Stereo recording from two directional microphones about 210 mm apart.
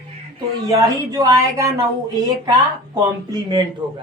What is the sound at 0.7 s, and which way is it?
A man's voice, 15° right (ahead or behind).